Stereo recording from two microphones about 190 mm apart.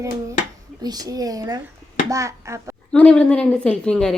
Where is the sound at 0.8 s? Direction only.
20° right (ahead or behind).